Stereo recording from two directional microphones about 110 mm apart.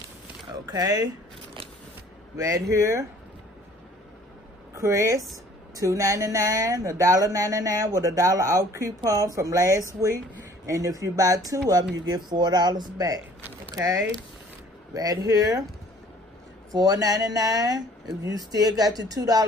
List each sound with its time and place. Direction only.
0.5 s speech: 35° right (ahead or behind)
2.3 s speech: 30° right (ahead or behind)
4.7 s speech: 30° right (ahead or behind)
16.7 s speech: 35° right (ahead or behind)